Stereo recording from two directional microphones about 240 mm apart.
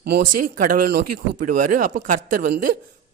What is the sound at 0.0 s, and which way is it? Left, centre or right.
Speech, right.